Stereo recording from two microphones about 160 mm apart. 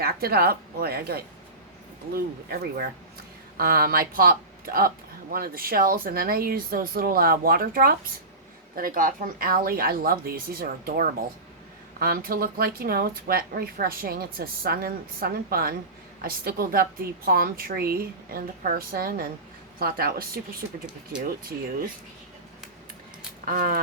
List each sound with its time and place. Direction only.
0.0 s speech: 75° right (ahead or behind)
23.5 s speech: 65° right (ahead or behind)